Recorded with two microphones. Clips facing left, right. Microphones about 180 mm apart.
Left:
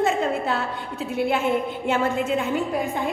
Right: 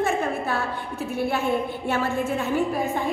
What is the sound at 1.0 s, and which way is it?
A woman's voice, 20° left (ahead or behind).